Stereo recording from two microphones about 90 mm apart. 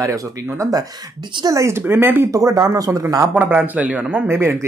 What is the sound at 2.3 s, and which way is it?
Speech, 40° right (ahead or behind).